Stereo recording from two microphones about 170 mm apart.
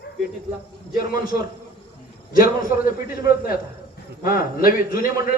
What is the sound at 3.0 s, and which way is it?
A man's voice, 60° left (ahead or behind).